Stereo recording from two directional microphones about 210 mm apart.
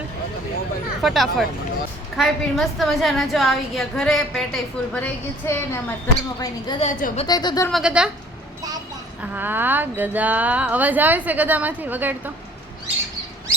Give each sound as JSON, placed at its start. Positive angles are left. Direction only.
{"t": 1.0, "sound": "a woman's voice", "side_deg": 0}
{"t": 5.5, "sound": "a woman's voice", "side_deg": 10}
{"t": 6.8, "sound": "a woman's voice", "side_deg": 35}
{"t": 7.3, "sound": "a woman's voice", "side_deg": 20}
{"t": 7.7, "sound": "a woman's voice", "side_deg": -5}
{"t": 9.3, "sound": "speech", "side_deg": -10}